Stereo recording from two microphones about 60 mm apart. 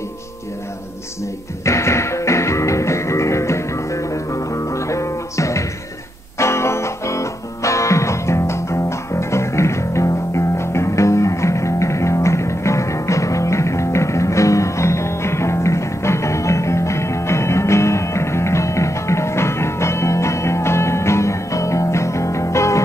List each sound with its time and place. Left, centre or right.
1.6 s music: left